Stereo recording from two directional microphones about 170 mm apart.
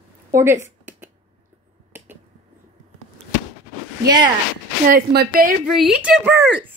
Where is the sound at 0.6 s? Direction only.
15° right (ahead or behind).